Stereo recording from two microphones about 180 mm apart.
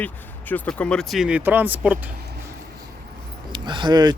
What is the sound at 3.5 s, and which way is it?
Speech, 25° right (ahead or behind).